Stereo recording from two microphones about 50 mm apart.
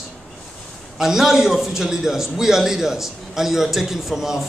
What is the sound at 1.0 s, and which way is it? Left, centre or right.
A man's voice, centre.